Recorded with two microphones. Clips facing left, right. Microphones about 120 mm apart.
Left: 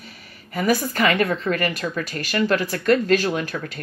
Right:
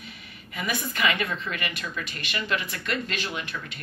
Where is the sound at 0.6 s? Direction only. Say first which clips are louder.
Left 9 dB; 40° left (ahead or behind).